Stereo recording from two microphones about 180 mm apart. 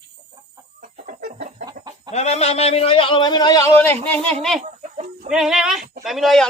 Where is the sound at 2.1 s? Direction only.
35° left (ahead or behind); by 4.6 s 5° left (ahead or behind).